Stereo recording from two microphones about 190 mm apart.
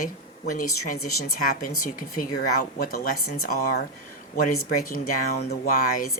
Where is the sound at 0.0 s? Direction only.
45° left (ahead or behind).